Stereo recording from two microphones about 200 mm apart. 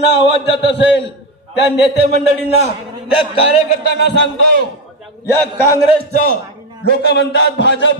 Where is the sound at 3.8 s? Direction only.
55° left (ahead or behind).